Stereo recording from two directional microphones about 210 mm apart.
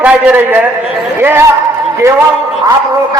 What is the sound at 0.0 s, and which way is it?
A man's voice, 5° right (ahead or behind).